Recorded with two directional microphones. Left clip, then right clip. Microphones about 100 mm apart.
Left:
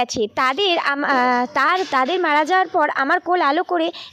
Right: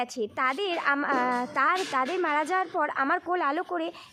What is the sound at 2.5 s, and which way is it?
Speech, 70° left (ahead or behind).